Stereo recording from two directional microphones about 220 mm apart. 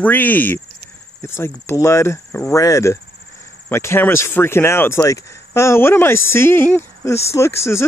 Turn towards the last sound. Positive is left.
turn(degrees=10)  # may be behind; listen again after turning